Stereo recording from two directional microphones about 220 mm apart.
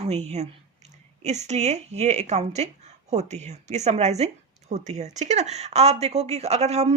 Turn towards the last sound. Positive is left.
turn(degrees=-30)  # may be behind; listen again after turning